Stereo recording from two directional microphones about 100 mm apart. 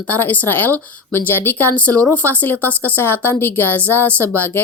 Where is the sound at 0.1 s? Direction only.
20° left (ahead or behind).